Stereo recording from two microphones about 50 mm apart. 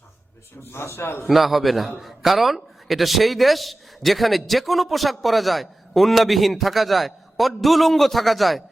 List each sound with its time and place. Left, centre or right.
0.6 s a man's voice: left
1.3 s a man's voice: centre